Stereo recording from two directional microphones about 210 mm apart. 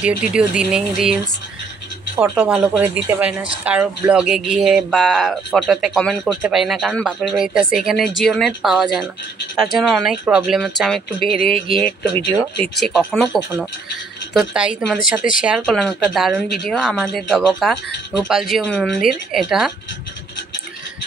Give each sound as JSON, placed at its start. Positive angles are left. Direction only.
{"t": 0.0, "sound": "speech", "side_deg": -5}
{"t": 11.1, "sound": "speech", "side_deg": -25}
{"t": 12.6, "sound": "speech", "side_deg": 0}